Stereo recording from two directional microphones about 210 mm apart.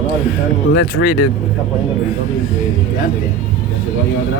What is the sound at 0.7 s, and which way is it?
Speech, 55° left (ahead or behind).